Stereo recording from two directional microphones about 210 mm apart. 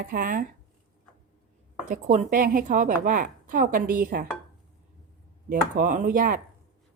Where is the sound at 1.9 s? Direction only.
35° right (ahead or behind).